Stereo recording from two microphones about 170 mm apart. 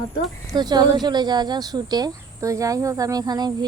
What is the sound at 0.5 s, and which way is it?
A woman's voice, 25° right (ahead or behind).